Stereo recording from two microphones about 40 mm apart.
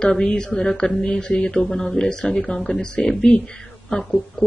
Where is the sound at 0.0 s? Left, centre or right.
Centre.